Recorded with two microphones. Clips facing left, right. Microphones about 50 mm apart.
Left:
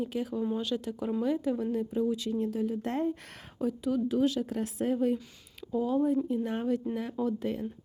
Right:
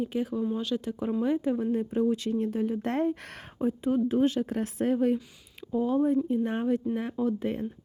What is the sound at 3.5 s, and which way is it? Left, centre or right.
Speech, right.